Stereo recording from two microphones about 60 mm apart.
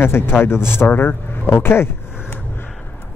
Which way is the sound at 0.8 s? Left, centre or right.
Left.